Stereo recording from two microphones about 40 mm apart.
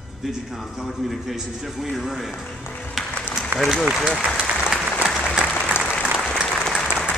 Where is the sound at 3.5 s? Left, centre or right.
Right.